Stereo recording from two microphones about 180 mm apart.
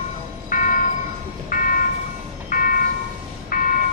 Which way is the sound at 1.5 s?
50° left (ahead or behind).